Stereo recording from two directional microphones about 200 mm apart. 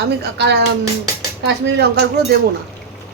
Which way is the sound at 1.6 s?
55° right (ahead or behind).